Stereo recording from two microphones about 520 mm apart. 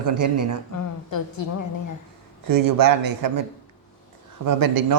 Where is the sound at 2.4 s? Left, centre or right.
Right.